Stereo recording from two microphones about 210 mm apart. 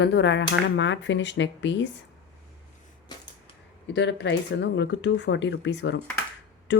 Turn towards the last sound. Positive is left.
turn(degrees=60)  # may be behind; listen again after turning